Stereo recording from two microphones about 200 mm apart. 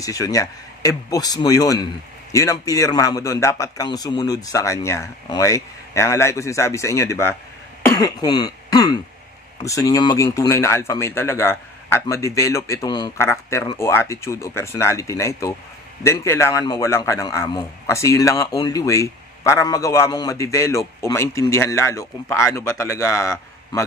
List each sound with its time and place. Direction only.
0.0 s a man's voice: 15° left (ahead or behind)
7.8 s throat clearing: 15° left (ahead or behind)
9.7 s a man's voice: 20° left (ahead or behind)